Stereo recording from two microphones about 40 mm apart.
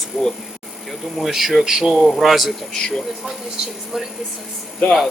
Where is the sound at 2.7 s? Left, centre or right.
Centre.